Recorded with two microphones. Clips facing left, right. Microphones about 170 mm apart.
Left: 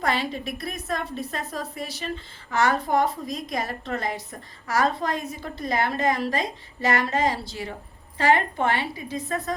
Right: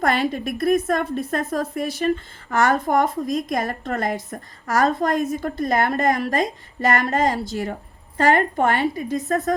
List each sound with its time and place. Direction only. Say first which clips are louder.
0.0 s a woman's voice: right 5 dB; 50° right (ahead or behind)